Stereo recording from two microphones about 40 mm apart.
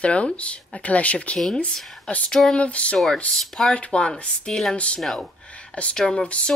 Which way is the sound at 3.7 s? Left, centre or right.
Left.